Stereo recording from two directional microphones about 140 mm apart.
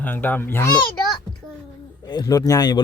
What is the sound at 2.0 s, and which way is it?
Speech, 30° left (ahead or behind).